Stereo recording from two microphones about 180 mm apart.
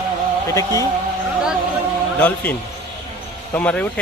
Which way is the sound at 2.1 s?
10° left (ahead or behind).